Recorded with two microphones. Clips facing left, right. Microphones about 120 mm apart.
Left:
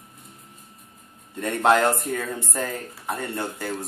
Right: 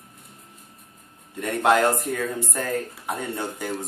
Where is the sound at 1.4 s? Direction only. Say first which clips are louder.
Even; 5° right (ahead or behind).